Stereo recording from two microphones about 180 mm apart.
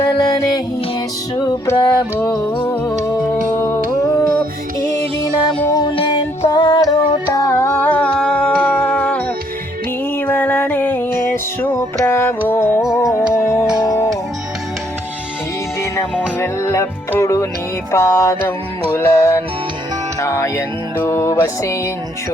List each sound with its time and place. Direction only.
0.1 s music: 20° left (ahead or behind)
1.6 s music: 15° left (ahead or behind)
2.1 s music: 10° left (ahead or behind)
5.3 s music: 20° left (ahead or behind)
7.6 s music: 10° left (ahead or behind)
12.8 s music: centre (ahead or behind)
13.3 s music: 15° left (ahead or behind)
13.7 s music: 5° right (ahead or behind)
15.8 s music: 15° left (ahead or behind)